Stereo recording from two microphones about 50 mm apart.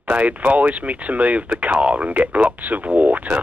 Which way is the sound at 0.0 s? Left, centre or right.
Right.